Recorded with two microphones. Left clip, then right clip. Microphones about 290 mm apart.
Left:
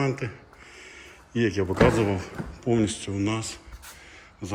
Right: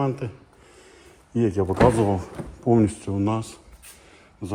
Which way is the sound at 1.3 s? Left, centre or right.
Centre.